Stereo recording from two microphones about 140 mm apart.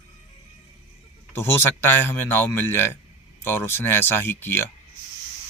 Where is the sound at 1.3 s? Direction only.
15° left (ahead or behind).